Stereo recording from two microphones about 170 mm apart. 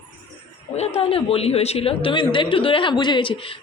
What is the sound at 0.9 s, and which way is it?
A woman's voice, 35° left (ahead or behind).